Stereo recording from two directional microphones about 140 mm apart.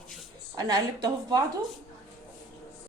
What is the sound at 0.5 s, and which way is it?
Speech, 30° right (ahead or behind).